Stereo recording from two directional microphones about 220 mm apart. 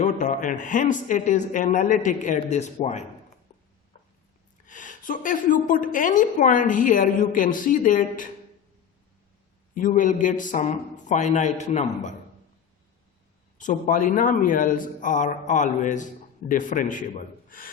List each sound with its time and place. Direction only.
0.0 s a woman's voice: 35° left (ahead or behind)
3.5 s a sound: 30° left (ahead or behind)
4.6 s a woman's voice: 35° left (ahead or behind)
9.7 s a woman's voice: 35° left (ahead or behind)
13.6 s a woman's voice: 35° left (ahead or behind)